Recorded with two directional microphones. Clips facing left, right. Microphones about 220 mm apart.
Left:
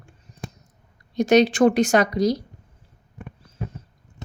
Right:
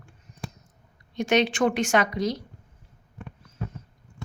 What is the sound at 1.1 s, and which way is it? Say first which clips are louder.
Speech: left 6 dB; 40° left (ahead or behind).